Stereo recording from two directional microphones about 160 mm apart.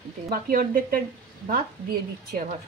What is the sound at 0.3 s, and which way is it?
Speech, 65° right (ahead or behind).